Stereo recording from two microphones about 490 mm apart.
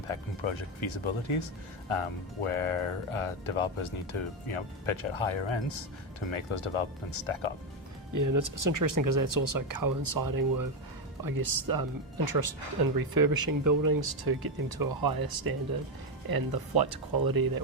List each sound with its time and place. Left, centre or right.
0.1 s speech: left
8.1 s speech: right